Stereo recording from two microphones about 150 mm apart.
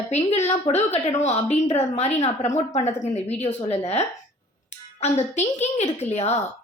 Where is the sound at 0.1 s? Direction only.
45° left (ahead or behind).